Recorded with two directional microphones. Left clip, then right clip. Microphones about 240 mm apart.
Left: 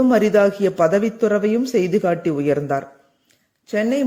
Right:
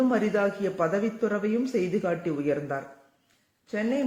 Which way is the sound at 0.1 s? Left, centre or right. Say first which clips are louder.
Left 10 dB; left.